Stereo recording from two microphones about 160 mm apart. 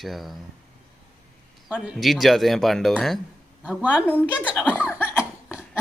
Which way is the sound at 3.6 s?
10° right (ahead or behind).